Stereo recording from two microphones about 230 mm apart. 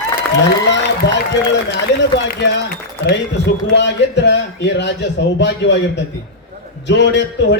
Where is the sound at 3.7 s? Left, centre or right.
Left.